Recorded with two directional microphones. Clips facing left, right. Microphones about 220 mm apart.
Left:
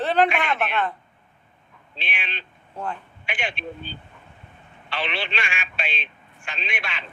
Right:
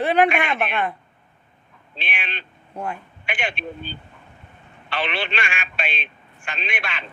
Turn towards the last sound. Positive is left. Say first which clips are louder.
# right 2 dB
turn(degrees=-55)  # may be behind; listen again after turning